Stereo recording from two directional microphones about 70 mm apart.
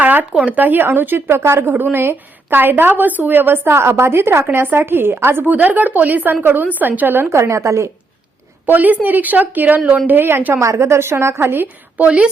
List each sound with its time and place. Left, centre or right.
0.0 s a sound: right
0.3 s a woman's voice: right
7.3 s a woman's voice: right
8.6 s a woman's voice: right
12.0 s a woman's voice: centre